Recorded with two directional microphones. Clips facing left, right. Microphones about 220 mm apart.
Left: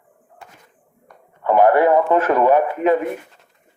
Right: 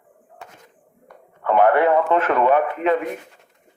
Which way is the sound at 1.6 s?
40° left (ahead or behind).